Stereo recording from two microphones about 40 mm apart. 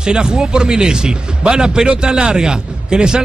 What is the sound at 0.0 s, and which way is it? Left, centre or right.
Speech, centre.